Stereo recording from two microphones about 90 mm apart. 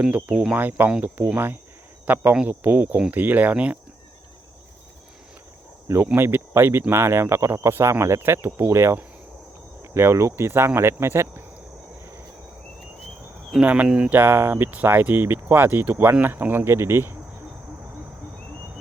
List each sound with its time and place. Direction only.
0.0 s speech: 15° right (ahead or behind)
6.1 s speech: 25° right (ahead or behind)
13.5 s speech: 15° right (ahead or behind)